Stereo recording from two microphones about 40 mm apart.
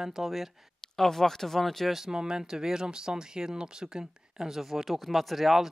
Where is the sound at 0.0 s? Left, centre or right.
Centre.